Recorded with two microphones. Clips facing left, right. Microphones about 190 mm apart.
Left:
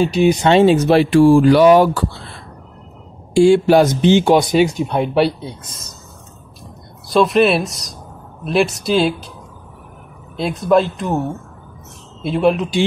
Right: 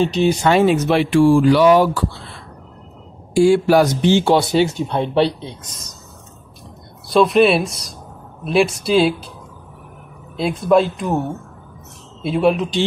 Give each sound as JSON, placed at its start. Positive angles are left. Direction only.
{"t": 0.0, "sound": "speech", "side_deg": 10}
{"t": 1.4, "sound": "speech", "side_deg": 50}
{"t": 3.3, "sound": "speech", "side_deg": 25}
{"t": 7.1, "sound": "speech", "side_deg": 0}
{"t": 10.3, "sound": "speech", "side_deg": 0}